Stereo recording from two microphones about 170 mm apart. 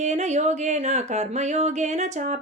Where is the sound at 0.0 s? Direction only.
40° right (ahead or behind).